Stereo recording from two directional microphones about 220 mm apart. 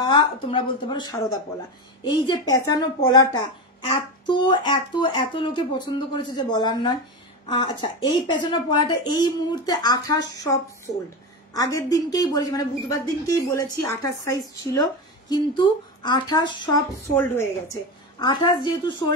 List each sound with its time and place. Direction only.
0.0 s a woman's voice: 20° left (ahead or behind)
17.1 s a woman's voice: 10° left (ahead or behind)
18.2 s speech: 20° left (ahead or behind)